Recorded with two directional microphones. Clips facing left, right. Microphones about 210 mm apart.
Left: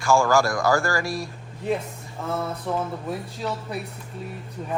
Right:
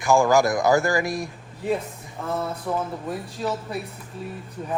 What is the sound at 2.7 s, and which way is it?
Speech, centre (ahead or behind).